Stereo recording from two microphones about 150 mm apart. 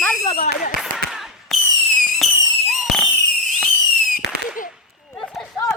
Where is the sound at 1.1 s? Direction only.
Centre (ahead or behind).